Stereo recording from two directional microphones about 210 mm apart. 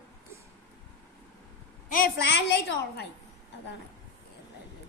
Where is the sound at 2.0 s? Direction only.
50° left (ahead or behind).